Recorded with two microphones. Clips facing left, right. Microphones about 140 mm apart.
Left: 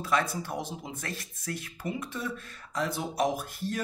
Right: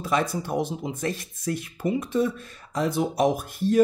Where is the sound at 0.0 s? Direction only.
20° right (ahead or behind).